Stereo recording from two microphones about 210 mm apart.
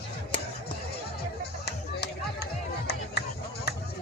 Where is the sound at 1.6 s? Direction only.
50° left (ahead or behind).